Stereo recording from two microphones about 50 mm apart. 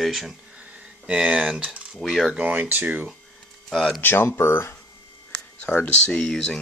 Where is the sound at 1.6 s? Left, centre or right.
Centre.